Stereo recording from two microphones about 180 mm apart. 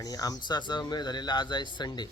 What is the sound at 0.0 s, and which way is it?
Speech, 20° left (ahead or behind).